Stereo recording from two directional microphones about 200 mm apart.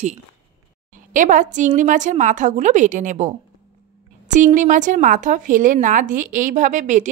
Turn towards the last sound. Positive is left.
turn(degrees=-40)  # may be behind; listen again after turning